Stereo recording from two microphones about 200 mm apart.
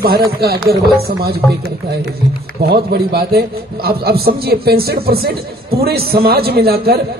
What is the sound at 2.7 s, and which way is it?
A man's voice, 50° right (ahead or behind).